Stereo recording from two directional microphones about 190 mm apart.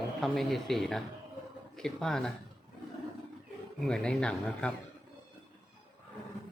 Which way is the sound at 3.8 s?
5° left (ahead or behind).